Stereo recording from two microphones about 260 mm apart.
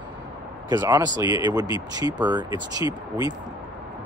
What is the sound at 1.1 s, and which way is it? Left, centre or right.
Speech, centre.